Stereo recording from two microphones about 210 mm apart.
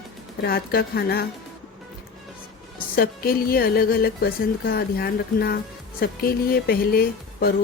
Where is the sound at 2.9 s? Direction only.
45° left (ahead or behind).